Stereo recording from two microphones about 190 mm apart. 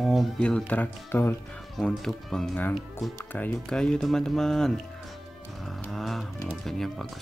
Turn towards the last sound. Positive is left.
turn(degrees=0)  # may be behind; listen again after turning